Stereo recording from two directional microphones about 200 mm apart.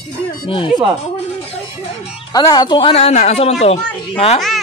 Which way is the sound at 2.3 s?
20° left (ahead or behind).